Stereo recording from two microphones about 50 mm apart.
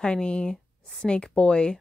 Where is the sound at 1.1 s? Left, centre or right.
Left.